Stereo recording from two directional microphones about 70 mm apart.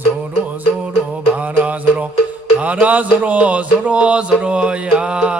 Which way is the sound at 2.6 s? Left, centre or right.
Right.